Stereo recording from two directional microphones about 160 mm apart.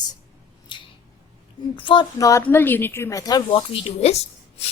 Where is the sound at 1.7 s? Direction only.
30° left (ahead or behind).